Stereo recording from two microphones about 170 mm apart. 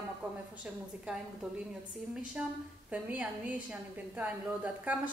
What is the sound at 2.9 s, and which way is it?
A woman's voice, 10° right (ahead or behind).